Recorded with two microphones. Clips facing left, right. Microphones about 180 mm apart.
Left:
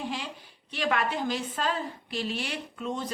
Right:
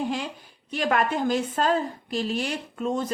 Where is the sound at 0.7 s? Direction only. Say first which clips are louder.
Right 4 dB; 45° right (ahead or behind).